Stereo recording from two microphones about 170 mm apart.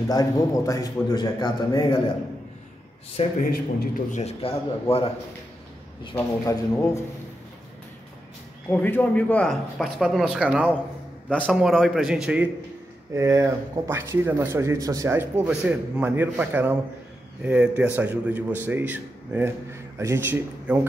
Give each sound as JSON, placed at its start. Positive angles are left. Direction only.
{"t": 0.1, "sound": "a man's voice", "side_deg": 20}
{"t": 3.4, "sound": "a man's voice", "side_deg": 60}
{"t": 4.2, "sound": "a man's voice", "side_deg": 35}
{"t": 6.1, "sound": "speech", "side_deg": 20}
{"t": 8.6, "sound": "speech", "side_deg": 10}
{"t": 13.1, "sound": "speech", "side_deg": -15}